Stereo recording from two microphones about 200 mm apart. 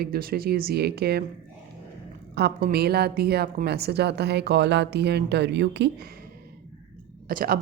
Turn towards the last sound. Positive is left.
turn(degrees=-45)  # may be behind; listen again after turning